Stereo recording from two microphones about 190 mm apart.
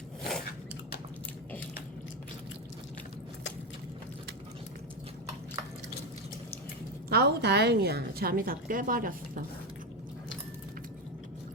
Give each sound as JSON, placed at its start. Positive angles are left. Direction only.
{"t": 0.2, "sound": "biting", "side_deg": 0}
{"t": 7.1, "sound": "a woman's voice", "side_deg": -60}